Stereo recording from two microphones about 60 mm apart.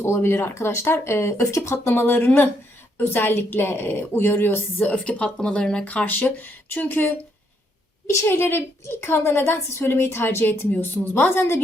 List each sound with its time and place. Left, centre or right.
0.0 s speech: left
1.5 s speech: left
1.8 s a woman's voice: left
4.4 s a woman's voice: left
4.9 s speech: centre
5.8 s a woman's voice: left
8.2 s a woman's voice: left
10.7 s a woman's voice: left